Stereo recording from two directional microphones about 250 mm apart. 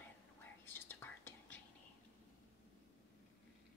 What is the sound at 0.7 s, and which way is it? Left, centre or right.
Whispering, centre.